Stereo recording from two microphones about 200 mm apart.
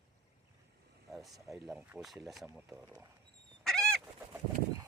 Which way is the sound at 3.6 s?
5° left (ahead or behind).